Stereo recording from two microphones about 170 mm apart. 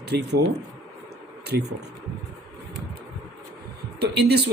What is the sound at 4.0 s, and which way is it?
Speech, 75° right (ahead or behind).